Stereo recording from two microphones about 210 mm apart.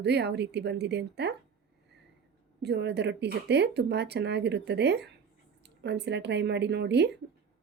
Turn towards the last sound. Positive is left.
turn(degrees=-55)  # may be behind; listen again after turning